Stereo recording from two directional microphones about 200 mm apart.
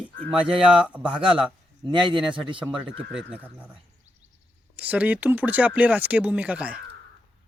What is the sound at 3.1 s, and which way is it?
Speech, 5° right (ahead or behind).